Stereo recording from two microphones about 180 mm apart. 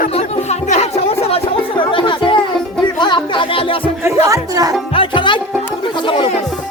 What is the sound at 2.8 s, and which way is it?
Music, 25° left (ahead or behind).